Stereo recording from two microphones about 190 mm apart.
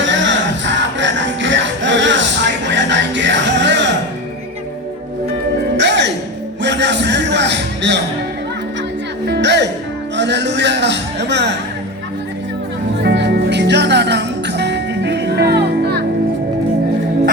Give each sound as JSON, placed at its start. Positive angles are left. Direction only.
{"t": 0.0, "sound": "music", "side_deg": -75}
{"t": 5.7, "sound": "music", "side_deg": -65}
{"t": 9.2, "sound": "music", "side_deg": -65}
{"t": 10.2, "sound": "a sound", "side_deg": -65}
{"t": 13.0, "sound": "music", "side_deg": -60}